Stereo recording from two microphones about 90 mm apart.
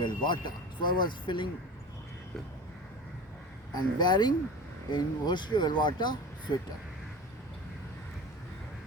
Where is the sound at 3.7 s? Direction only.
50° left (ahead or behind).